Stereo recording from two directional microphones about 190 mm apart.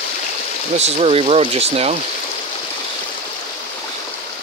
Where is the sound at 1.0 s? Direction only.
30° right (ahead or behind).